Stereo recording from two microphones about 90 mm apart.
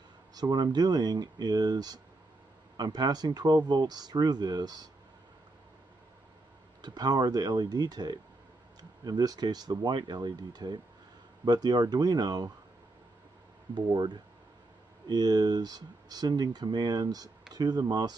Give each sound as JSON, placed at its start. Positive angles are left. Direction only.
{"t": 0.3, "sound": "speech", "side_deg": -50}
{"t": 6.8, "sound": "speech", "side_deg": -50}
{"t": 13.7, "sound": "speech", "side_deg": -55}